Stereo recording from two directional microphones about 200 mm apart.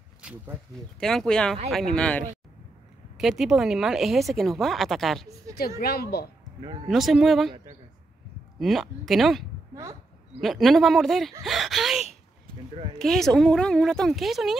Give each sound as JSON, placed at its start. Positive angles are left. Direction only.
{"t": 0.2, "sound": "speech", "side_deg": -5}
{"t": 5.8, "sound": "speech", "side_deg": 50}
{"t": 6.9, "sound": "speech", "side_deg": 0}
{"t": 8.5, "sound": "speech", "side_deg": 0}